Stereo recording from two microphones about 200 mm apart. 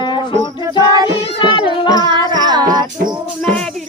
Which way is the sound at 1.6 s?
20° right (ahead or behind).